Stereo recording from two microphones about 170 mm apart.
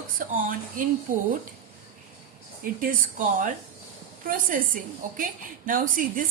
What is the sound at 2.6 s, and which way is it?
Speech, 55° right (ahead or behind).